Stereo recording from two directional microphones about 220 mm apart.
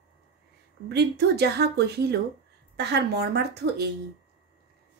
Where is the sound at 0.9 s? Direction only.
50° right (ahead or behind).